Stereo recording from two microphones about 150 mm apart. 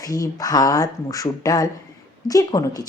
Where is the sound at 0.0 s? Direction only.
25° left (ahead or behind).